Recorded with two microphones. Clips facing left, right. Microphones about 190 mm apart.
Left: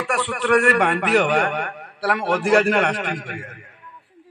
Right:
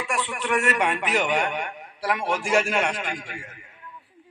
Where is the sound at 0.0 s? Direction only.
65° left (ahead or behind).